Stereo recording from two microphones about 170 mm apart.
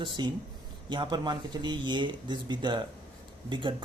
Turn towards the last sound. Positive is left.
turn(degrees=-30)  # may be behind; listen again after turning